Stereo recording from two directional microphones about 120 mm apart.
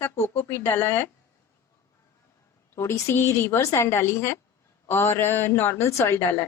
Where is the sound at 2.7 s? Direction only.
25° left (ahead or behind).